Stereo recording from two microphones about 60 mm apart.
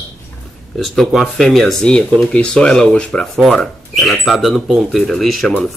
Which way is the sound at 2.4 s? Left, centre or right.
Centre.